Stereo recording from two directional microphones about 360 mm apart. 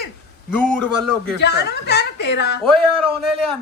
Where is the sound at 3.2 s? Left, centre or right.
Centre.